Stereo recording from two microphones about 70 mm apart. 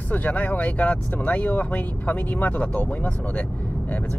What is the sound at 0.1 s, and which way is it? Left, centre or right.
Speech, left.